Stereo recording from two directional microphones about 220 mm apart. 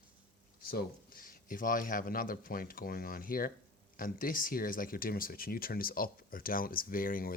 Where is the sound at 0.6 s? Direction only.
40° left (ahead or behind).